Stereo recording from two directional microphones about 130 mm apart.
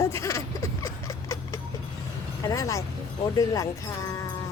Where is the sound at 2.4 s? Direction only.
25° left (ahead or behind).